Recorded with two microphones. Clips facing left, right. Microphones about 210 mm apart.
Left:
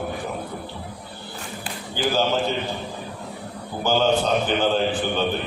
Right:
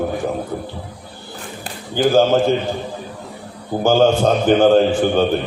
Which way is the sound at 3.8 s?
45° right (ahead or behind).